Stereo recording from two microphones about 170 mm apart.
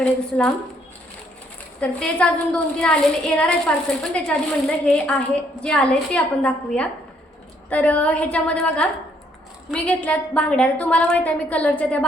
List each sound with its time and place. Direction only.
0.0 s a woman's voice: 5° left (ahead or behind)
1.8 s a woman's voice: 5° left (ahead or behind)